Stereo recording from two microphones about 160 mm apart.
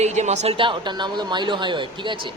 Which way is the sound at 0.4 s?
30° right (ahead or behind).